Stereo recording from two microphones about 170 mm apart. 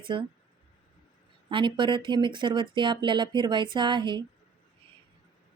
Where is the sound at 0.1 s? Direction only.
25° right (ahead or behind).